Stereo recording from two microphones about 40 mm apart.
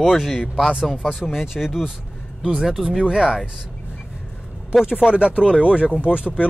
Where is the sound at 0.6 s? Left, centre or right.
Centre.